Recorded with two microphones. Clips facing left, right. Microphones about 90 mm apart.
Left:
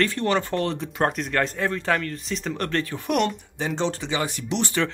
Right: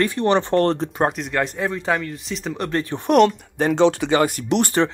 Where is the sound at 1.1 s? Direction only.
5° right (ahead or behind).